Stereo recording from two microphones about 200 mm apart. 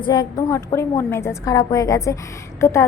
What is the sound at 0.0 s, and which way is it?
A woman's voice, 20° left (ahead or behind).